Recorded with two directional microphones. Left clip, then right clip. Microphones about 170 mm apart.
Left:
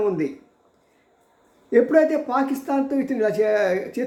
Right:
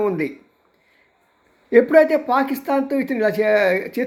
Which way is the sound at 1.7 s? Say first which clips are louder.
Right 4 dB; 20° right (ahead or behind).